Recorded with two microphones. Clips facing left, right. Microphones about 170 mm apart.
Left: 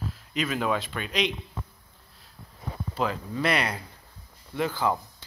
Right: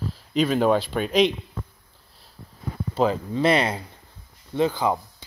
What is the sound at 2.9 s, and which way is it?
Speech, 30° right (ahead or behind).